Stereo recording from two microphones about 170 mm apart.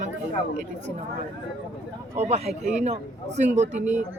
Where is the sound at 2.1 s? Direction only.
40° right (ahead or behind).